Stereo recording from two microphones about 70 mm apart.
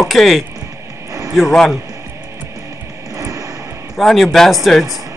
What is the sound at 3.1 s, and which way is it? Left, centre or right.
Vehicle, right.